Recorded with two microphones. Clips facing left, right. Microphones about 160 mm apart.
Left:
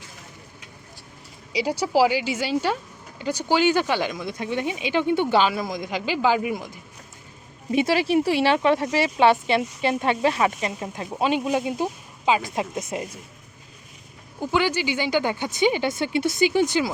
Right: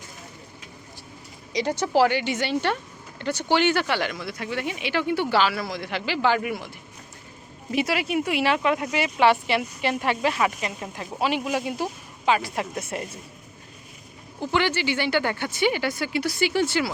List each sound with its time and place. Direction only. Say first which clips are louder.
1.5 s speech: left 1 dB; 10° left (ahead or behind)
7.7 s speech: left 4 dB; 25° left (ahead or behind)
14.3 s speech: left 1 dB; 10° left (ahead or behind)